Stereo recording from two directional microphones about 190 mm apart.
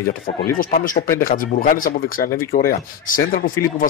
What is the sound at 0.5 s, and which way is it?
Speech, 45° left (ahead or behind).